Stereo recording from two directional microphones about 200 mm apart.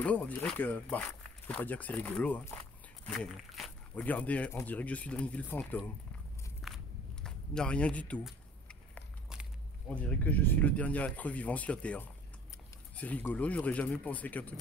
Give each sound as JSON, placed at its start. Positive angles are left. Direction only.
{"t": 0.0, "sound": "speech", "side_deg": 5}
{"t": 3.4, "sound": "speech", "side_deg": 0}
{"t": 6.6, "sound": "walk", "side_deg": 0}
{"t": 7.2, "sound": "a sound", "side_deg": 5}
{"t": 9.8, "sound": "speech", "side_deg": 5}